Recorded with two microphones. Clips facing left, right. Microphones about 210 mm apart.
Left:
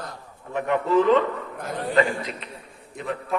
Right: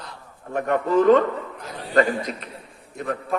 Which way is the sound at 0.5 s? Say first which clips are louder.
Right 1 dB; 45° right (ahead or behind).